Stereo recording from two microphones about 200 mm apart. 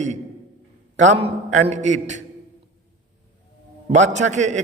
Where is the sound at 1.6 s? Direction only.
35° right (ahead or behind).